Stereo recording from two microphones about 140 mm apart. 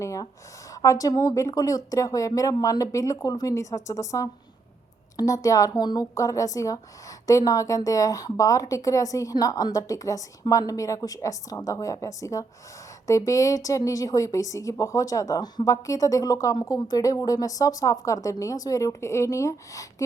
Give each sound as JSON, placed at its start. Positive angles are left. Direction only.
{"t": 0.0, "sound": "speech", "side_deg": 20}